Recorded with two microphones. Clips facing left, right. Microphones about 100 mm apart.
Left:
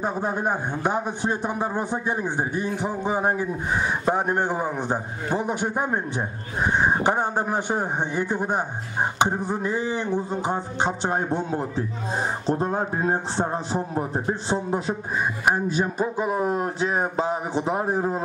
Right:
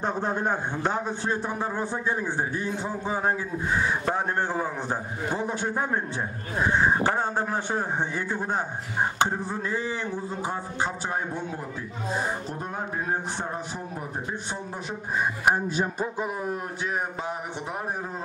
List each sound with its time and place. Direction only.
0.0 s a man's voice: 10° left (ahead or behind); by 14.6 s 30° left (ahead or behind)
16.3 s speech: 90° left
17.7 s speech: 25° left (ahead or behind)